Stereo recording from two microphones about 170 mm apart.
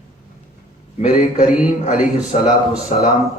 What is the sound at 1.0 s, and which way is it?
Speech, 45° left (ahead or behind).